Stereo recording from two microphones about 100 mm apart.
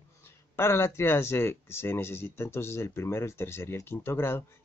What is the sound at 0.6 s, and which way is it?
Speech, 25° left (ahead or behind).